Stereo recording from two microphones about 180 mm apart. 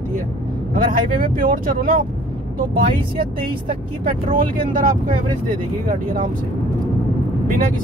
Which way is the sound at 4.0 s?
50° right (ahead or behind).